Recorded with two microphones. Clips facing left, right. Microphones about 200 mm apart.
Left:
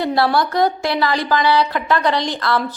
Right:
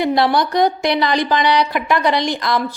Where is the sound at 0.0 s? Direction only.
15° right (ahead or behind).